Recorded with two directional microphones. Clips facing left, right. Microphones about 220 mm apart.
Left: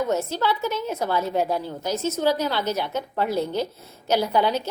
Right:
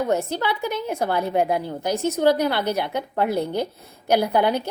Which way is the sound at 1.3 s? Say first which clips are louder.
Right 2 dB; 55° right (ahead or behind).